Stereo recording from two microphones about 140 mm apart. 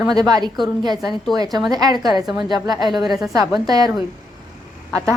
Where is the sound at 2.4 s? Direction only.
30° right (ahead or behind).